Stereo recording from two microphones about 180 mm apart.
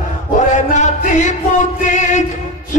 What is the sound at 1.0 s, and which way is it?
Music, 45° left (ahead or behind).